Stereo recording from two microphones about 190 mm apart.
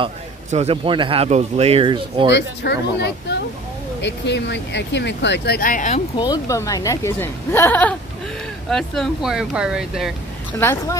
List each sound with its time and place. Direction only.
0.5 s speech: 35° right (ahead or behind)
2.3 s speech: 60° left (ahead or behind); by 6.0 s 40° left (ahead or behind)
6.1 s a woman's voice: 20° left (ahead or behind); by 10.1 s 5° right (ahead or behind)
10.6 s a woman's voice: 10° left (ahead or behind)